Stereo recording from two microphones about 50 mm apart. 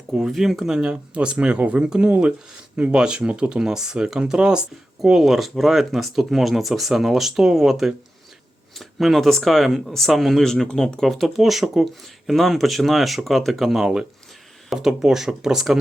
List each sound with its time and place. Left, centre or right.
0.3 s speech: centre
0.7 s speech: centre
5.2 s speech: centre
11.1 s speech: centre